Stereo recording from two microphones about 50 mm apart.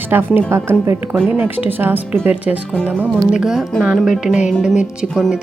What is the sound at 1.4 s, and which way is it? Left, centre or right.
Speech, right.